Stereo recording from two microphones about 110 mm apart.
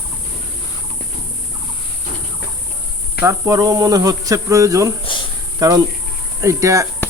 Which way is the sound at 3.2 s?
30° right (ahead or behind).